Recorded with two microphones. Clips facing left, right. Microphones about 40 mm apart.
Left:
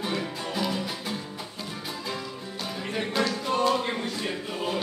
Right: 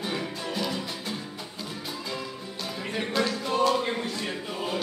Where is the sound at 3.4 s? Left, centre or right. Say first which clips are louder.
Right 1 dB; centre.